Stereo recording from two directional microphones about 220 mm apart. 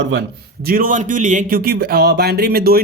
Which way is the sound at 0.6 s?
40° right (ahead or behind).